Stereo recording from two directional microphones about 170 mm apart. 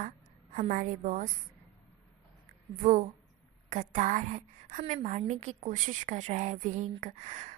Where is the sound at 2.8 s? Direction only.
50° right (ahead or behind).